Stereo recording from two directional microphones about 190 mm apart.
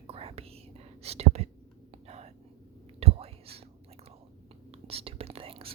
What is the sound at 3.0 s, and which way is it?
Whispering, 30° right (ahead or behind).